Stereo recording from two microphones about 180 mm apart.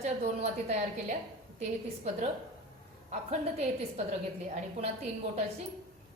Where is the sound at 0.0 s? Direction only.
40° right (ahead or behind).